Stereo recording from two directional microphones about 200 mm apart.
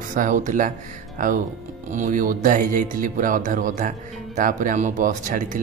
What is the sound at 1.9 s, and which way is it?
Speech, 40° right (ahead or behind).